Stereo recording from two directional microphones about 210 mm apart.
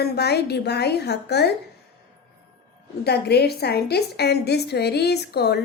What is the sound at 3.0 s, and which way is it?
A woman's voice, 50° left (ahead or behind).